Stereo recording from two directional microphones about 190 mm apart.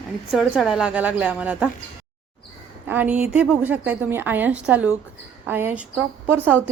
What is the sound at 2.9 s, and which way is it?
A woman's voice, 10° right (ahead or behind).